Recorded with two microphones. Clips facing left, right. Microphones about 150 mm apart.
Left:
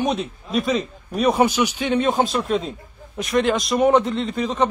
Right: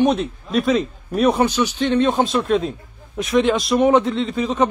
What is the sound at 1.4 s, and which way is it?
Speech, 10° left (ahead or behind).